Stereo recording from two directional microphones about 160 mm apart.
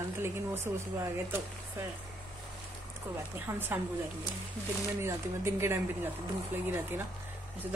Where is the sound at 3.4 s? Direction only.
15° right (ahead or behind).